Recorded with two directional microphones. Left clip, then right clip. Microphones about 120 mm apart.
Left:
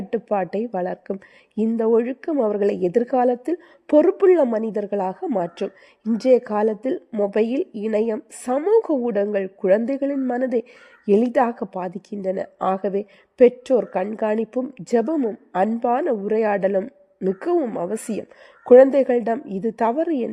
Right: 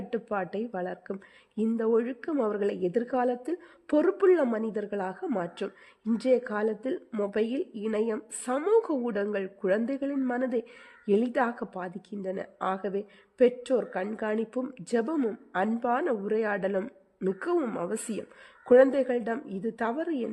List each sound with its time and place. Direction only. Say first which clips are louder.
0.1 s a woman's voice: left 9 dB; 35° left (ahead or behind)
6.1 s a woman's voice: left 9 dB; 45° left (ahead or behind)